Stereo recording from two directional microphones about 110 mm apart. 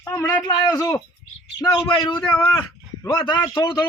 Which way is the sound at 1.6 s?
45° left (ahead or behind).